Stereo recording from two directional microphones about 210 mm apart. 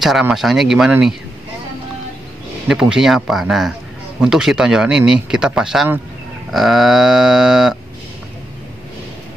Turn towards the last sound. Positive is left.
turn(degrees=0)  # may be behind; listen again after turning